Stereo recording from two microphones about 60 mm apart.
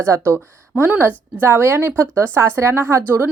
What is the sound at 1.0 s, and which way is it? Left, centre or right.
Speech, right.